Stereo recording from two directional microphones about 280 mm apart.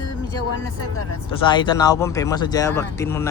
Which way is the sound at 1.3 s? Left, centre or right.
Centre.